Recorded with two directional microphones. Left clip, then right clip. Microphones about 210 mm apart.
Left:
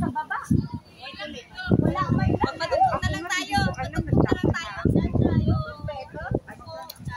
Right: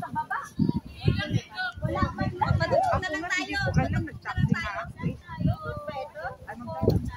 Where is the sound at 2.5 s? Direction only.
40° left (ahead or behind).